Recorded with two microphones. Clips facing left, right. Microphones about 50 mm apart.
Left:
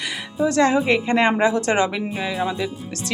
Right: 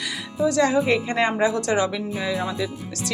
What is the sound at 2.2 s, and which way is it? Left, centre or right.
Speech, left.